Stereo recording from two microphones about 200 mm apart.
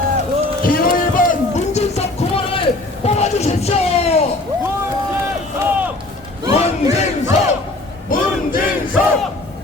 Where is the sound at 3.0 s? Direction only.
35° left (ahead or behind).